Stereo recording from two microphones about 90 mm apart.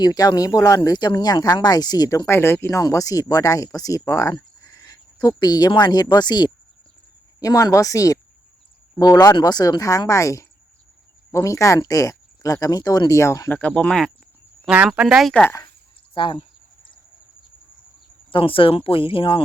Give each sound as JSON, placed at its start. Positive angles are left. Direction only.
{"t": 0.0, "sound": "speech", "side_deg": 45}
{"t": 2.2, "sound": "speech", "side_deg": 25}
{"t": 2.6, "sound": "speech", "side_deg": 35}
{"t": 7.3, "sound": "speech", "side_deg": 40}
{"t": 13.5, "sound": "speech", "side_deg": 15}
{"t": 14.6, "sound": "cricket", "side_deg": -15}
{"t": 14.8, "sound": "speech", "side_deg": -5}
{"t": 16.1, "sound": "speech", "side_deg": 70}
{"t": 18.3, "sound": "speech", "side_deg": 80}